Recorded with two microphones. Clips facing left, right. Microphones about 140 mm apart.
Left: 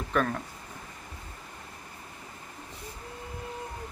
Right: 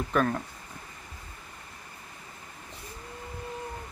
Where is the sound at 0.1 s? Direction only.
Centre (ahead or behind).